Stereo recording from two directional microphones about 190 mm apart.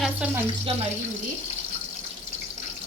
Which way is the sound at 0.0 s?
5° right (ahead or behind).